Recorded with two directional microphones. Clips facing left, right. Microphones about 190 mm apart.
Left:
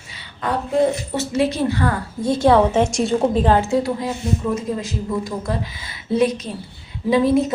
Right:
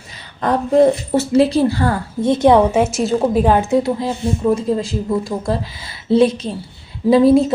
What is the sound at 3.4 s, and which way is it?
A woman's voice, 15° right (ahead or behind).